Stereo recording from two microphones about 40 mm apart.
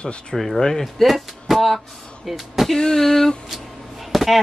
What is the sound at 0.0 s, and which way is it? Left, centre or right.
Speech, left.